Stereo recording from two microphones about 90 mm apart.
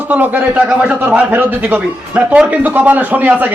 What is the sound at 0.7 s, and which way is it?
Speech, 5° right (ahead or behind).